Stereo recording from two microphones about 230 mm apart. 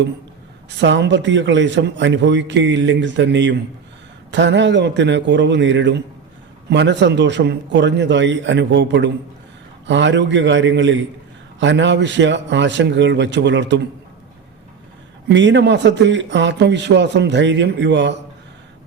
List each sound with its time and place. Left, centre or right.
0.8 s a man's voice: right
15.3 s a man's voice: right